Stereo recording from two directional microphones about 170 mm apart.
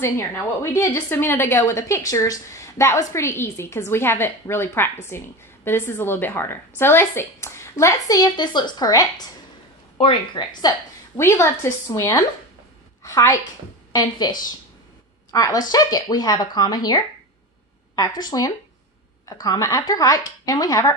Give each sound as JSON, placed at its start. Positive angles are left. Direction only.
{"t": 0.0, "sound": "a woman's voice", "side_deg": 15}
{"t": 11.1, "sound": "a woman's voice", "side_deg": 15}
{"t": 15.3, "sound": "speech", "side_deg": 20}